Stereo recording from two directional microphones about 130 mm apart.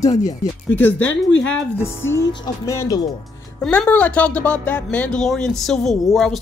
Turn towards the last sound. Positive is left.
turn(degrees=5)  # may be behind; listen again after turning